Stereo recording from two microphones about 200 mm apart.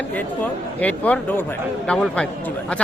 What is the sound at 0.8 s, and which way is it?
Speech, 5° left (ahead or behind).